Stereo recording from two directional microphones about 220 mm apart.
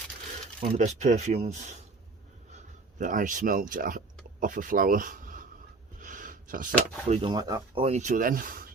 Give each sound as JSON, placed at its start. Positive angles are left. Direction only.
{"t": 0.6, "sound": "speech", "side_deg": -30}
{"t": 3.0, "sound": "speech", "side_deg": -35}
{"t": 6.0, "sound": "a sound", "side_deg": -35}
{"t": 7.1, "sound": "speech", "side_deg": -25}
{"t": 7.9, "sound": "speech", "side_deg": -35}